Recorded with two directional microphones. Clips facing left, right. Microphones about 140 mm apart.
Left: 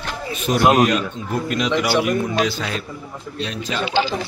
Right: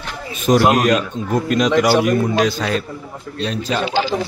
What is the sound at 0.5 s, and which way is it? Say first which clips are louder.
A man's voice: right 2 dB; 45° right (ahead or behind).